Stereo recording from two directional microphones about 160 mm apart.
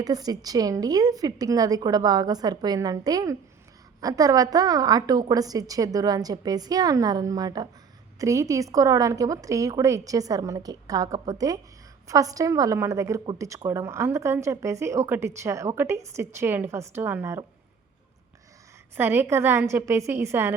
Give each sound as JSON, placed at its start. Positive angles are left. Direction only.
{"t": 0.0, "sound": "a woman's voice", "side_deg": -25}
{"t": 18.9, "sound": "a woman's voice", "side_deg": -15}